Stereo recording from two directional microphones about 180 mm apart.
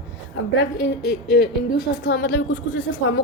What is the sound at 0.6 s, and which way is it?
Speech, 70° left (ahead or behind).